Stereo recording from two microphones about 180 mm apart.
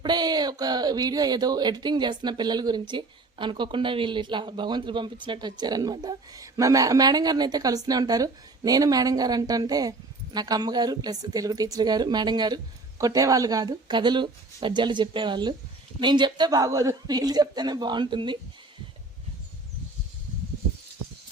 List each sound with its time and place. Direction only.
0.0 s speech: 25° right (ahead or behind)